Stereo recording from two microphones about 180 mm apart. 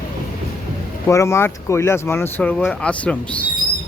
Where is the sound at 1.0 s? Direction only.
15° left (ahead or behind).